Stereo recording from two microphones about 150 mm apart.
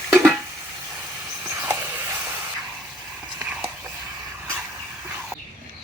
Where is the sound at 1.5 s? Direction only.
15° right (ahead or behind).